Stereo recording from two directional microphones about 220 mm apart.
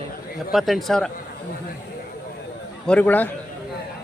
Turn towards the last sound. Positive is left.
turn(degrees=5)  # may be behind; listen again after turning